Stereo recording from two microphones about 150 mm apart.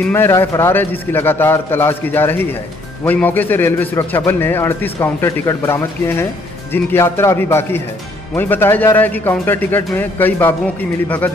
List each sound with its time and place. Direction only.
0.0 s a man's voice: 15° left (ahead or behind)